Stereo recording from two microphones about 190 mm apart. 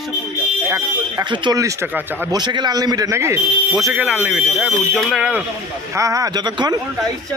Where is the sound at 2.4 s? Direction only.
20° right (ahead or behind); by 5.4 s 5° right (ahead or behind).